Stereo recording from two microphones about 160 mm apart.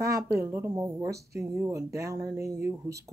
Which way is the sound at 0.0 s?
20° right (ahead or behind).